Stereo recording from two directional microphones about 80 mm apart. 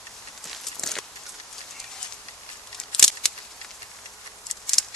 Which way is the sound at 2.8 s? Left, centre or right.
Centre.